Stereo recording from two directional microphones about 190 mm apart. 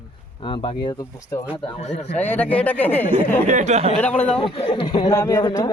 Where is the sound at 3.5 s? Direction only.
40° right (ahead or behind).